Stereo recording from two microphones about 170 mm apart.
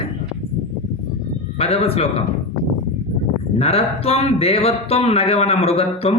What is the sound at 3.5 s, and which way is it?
Speech, 35° left (ahead or behind).